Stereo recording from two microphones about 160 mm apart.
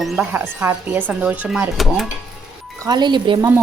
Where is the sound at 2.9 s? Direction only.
25° right (ahead or behind).